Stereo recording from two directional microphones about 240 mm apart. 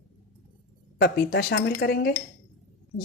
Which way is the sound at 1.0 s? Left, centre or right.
Left.